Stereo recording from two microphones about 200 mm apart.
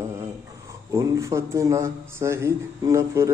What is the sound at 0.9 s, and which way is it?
Speech, 15° right (ahead or behind).